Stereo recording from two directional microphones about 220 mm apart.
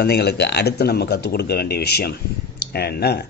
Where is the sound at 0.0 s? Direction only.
45° left (ahead or behind).